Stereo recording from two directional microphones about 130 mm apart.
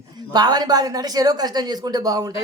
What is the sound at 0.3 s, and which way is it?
A man's voice, 30° right (ahead or behind).